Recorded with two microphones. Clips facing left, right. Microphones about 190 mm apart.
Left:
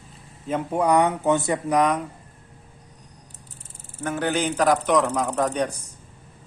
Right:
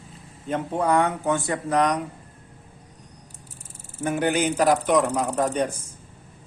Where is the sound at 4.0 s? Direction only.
15° right (ahead or behind).